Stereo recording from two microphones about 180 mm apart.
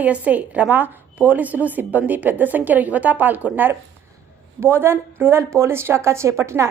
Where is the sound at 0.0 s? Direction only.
10° right (ahead or behind).